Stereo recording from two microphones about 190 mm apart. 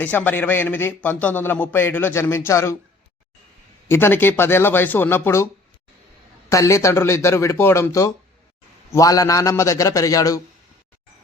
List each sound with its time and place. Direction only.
0.0 s a man's voice: 10° left (ahead or behind)
3.8 s a man's voice: 10° left (ahead or behind)
6.5 s a man's voice: 15° left (ahead or behind)